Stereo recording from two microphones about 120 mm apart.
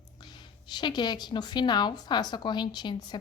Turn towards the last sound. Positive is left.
turn(degrees=35)  # may be behind; listen again after turning